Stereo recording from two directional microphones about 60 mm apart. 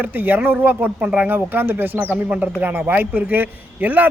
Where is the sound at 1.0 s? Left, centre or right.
Right.